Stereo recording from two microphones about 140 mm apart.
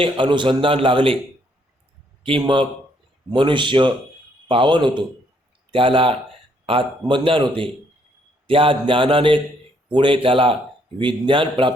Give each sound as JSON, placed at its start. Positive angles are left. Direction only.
{"t": 0.0, "sound": "a man's voice", "side_deg": -35}
{"t": 2.2, "sound": "a man's voice", "side_deg": -40}